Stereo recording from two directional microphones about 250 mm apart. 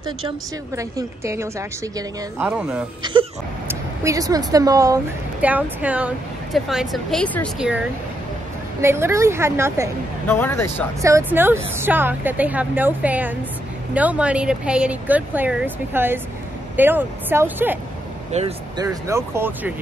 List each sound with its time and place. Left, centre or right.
0.7 s speech: centre
3.0 s speech: centre
8.8 s speech: centre
10.2 s speech: centre
11.0 s speech: centre
18.3 s speech: right
18.9 s speech: centre